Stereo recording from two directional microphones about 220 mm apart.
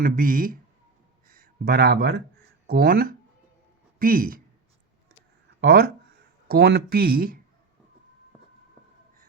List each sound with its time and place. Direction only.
0.0 s speech: 40° right (ahead or behind)
5.5 s speech: 50° right (ahead or behind)